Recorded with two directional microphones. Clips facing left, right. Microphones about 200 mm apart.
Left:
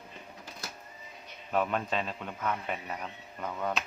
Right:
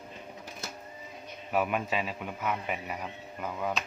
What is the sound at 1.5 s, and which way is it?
A man's voice, 10° right (ahead or behind).